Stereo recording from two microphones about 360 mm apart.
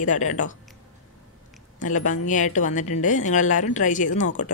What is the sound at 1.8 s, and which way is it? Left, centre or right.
Speech, left.